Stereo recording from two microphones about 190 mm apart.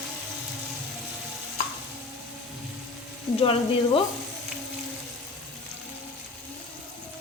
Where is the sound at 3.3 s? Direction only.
30° left (ahead or behind).